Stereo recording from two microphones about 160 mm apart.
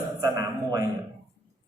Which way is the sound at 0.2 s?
20° right (ahead or behind).